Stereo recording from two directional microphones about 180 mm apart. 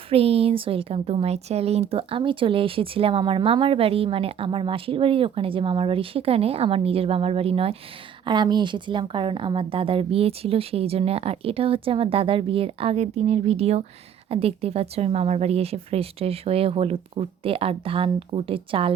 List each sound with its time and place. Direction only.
0.1 s speech: 35° right (ahead or behind)